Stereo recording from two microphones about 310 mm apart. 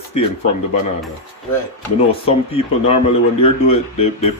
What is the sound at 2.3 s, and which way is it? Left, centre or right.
Speech, centre.